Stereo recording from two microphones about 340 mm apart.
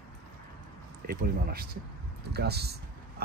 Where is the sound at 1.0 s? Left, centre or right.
Right.